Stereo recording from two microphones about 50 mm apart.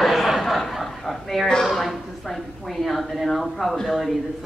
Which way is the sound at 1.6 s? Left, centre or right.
Centre.